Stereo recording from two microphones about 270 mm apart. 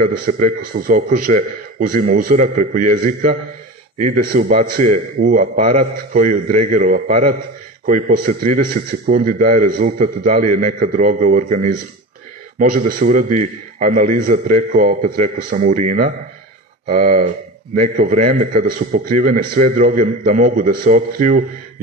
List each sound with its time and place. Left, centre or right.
0.0 s a man's voice: right